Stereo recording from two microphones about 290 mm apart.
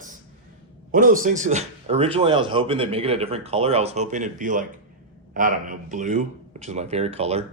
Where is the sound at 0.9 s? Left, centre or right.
Right.